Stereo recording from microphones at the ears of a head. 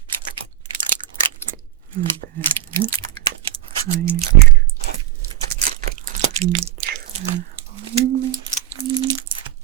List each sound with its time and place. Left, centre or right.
0.1 s a sound: right
1.5 s chewing: right
5.5 s crunch: right